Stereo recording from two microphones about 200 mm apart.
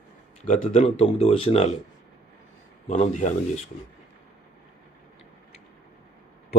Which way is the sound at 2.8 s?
35° left (ahead or behind).